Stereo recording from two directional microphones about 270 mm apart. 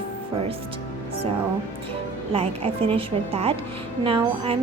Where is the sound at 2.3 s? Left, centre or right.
Right.